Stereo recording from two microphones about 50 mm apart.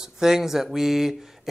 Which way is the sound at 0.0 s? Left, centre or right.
Centre.